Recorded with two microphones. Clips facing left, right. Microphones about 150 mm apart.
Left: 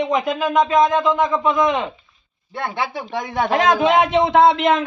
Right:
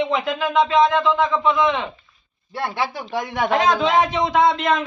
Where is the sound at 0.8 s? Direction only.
15° left (ahead or behind).